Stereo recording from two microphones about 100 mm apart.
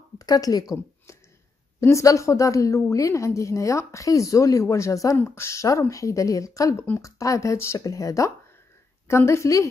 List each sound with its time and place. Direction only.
0.3 s a woman's voice: 40° left (ahead or behind)
1.8 s a woman's voice: 30° left (ahead or behind)